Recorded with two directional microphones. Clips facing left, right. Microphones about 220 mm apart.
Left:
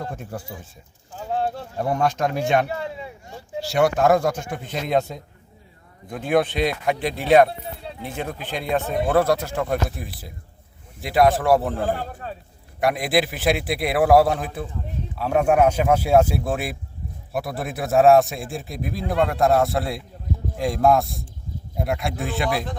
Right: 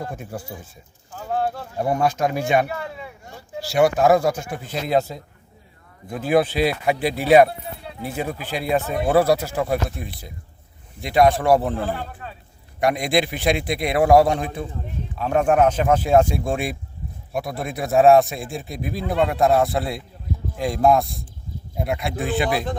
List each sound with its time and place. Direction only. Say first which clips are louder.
1.9 s speech: right 1 dB; 10° right (ahead or behind)
2.6 s a sound: left 1 dB; 25° left (ahead or behind)
3.8 s a man's voice: right 2 dB; 5° right (ahead or behind)
11.8 s speech: left 2 dB; 45° left (ahead or behind)
12.8 s a man's voice: right 1 dB; centre (ahead or behind)